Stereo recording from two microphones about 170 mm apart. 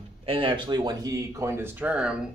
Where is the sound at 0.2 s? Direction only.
30° right (ahead or behind).